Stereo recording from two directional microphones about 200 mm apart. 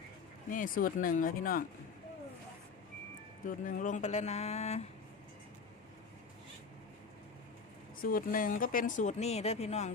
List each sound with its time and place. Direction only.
0.5 s speech: 45° left (ahead or behind)
3.4 s speech: 40° left (ahead or behind)
8.0 s speech: 45° left (ahead or behind)